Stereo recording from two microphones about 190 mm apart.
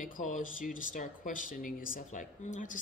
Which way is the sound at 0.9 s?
45° left (ahead or behind).